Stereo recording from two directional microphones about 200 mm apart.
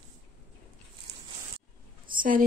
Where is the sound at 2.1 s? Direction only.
45° right (ahead or behind).